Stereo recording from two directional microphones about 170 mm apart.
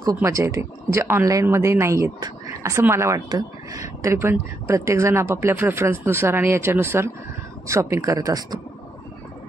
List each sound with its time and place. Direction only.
0.0 s speech: 20° right (ahead or behind)